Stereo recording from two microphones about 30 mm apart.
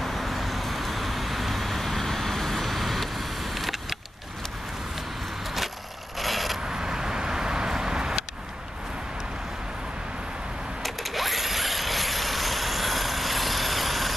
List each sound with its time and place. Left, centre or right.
0.0 s vehicle: centre
6.1 s vehicle: centre
6.7 s vehicle: right
10.8 s a sound: centre